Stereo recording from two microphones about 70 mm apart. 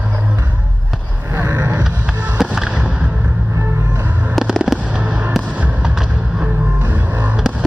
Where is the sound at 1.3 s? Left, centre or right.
Right.